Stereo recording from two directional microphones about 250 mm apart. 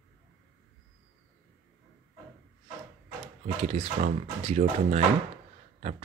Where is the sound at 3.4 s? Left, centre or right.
Right.